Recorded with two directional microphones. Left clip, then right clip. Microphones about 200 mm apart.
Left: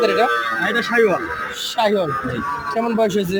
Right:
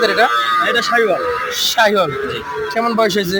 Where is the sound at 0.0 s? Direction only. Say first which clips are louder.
Right 3 dB; 5° left (ahead or behind).